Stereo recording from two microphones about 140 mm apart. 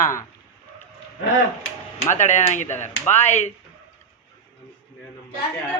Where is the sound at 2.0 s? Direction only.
60° left (ahead or behind).